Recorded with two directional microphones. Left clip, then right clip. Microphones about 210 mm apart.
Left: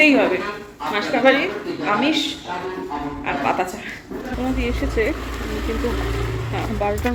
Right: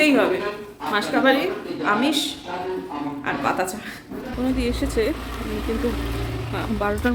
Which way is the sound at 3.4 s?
10° right (ahead or behind).